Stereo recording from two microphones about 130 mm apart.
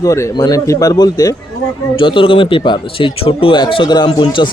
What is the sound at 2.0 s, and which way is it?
Speech, 40° left (ahead or behind).